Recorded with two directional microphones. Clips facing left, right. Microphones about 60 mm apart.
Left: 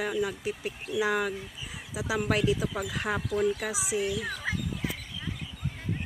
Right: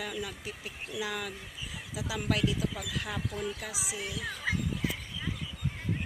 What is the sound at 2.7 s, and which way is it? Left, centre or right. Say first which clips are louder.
Speech: left 6 dB; left.